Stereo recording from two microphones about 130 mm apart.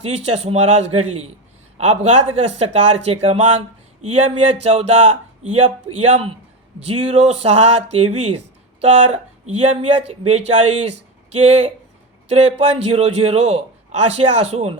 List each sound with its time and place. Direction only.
0.0 s speech: 55° right (ahead or behind)